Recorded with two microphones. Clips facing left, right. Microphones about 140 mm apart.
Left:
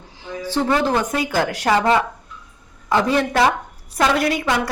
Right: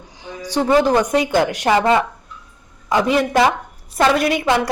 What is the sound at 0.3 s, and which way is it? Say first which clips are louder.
A woman's voice: right 2 dB; 15° right (ahead or behind).